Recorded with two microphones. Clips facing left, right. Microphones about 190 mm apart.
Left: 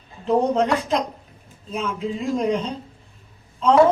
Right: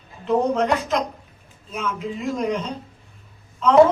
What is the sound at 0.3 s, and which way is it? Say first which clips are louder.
Speech: left 1 dB; 30° left (ahead or behind).